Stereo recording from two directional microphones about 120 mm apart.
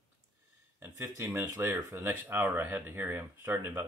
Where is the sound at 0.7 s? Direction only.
20° right (ahead or behind).